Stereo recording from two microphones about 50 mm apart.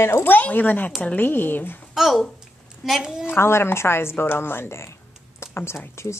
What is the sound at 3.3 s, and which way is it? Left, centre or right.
Speech, left.